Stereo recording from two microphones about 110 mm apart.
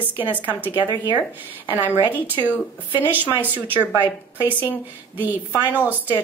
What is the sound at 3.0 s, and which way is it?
Speech, 15° right (ahead or behind).